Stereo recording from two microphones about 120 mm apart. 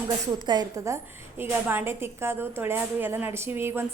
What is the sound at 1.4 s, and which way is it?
A woman's voice, 15° right (ahead or behind).